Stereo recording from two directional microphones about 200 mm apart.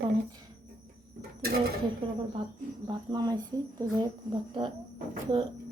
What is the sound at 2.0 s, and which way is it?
A woman's voice, 25° right (ahead or behind).